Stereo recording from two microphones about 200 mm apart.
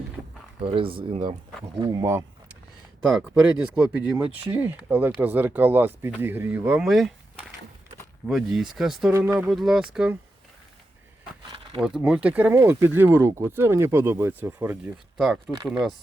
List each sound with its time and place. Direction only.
0.6 s speech: 25° right (ahead or behind)
1.8 s speech: 20° right (ahead or behind)
3.8 s speech: 5° right (ahead or behind)
8.3 s speech: centre (ahead or behind)
11.8 s speech: 5° right (ahead or behind)
15.2 s speech: centre (ahead or behind)